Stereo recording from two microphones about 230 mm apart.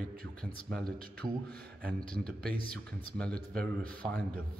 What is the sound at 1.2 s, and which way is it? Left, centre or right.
Speech, centre.